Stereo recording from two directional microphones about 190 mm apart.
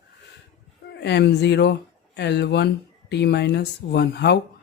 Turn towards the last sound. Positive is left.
turn(degrees=60)  # may be behind; listen again after turning